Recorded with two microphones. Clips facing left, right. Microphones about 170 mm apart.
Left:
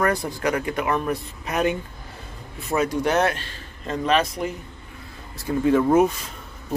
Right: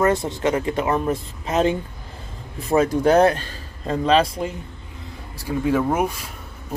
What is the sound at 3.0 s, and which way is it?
A man's voice, 35° right (ahead or behind).